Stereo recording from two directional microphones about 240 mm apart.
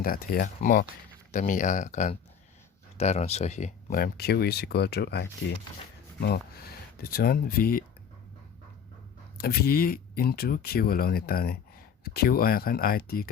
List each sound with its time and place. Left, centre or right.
0.0 s speech: left
9.4 s speech: left